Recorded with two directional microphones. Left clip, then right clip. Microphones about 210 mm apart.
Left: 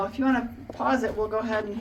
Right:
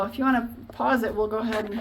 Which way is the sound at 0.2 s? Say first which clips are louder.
Right 2 dB; 50° right (ahead or behind).